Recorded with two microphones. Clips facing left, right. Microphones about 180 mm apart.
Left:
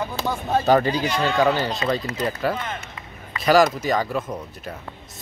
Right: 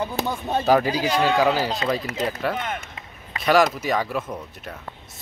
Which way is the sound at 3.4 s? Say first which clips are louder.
Left 2 dB; centre (ahead or behind).